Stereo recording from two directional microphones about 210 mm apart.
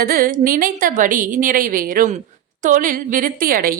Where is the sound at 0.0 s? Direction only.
45° right (ahead or behind).